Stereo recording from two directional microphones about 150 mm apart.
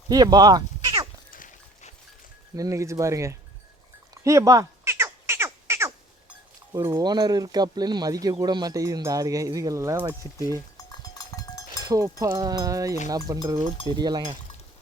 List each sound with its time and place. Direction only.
0.1 s speech: 25° right (ahead or behind)
1.3 s horse: 65° left (ahead or behind)
2.6 s speech: 20° right (ahead or behind)
4.2 s cat: 20° right (ahead or behind)
6.7 s speech: 20° right (ahead or behind)
11.8 s speech: 25° right (ahead or behind)